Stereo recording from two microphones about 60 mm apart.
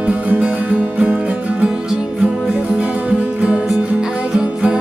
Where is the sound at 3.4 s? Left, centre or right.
Centre.